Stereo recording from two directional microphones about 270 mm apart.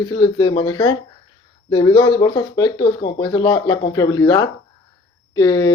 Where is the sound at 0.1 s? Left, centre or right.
Centre.